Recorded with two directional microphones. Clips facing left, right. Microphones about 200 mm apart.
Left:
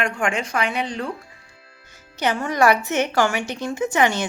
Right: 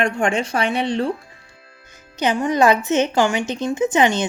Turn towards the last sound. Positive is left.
turn(degrees=-20)  # may be behind; listen again after turning